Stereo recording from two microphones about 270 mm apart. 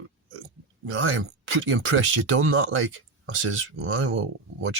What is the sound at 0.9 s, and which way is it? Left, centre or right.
Speech, right.